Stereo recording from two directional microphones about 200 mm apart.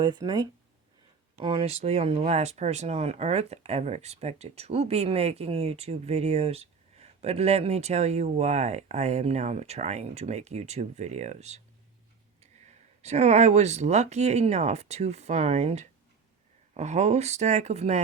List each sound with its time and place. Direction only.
0.0 s speech: 20° right (ahead or behind)
1.5 s speech: 30° right (ahead or behind)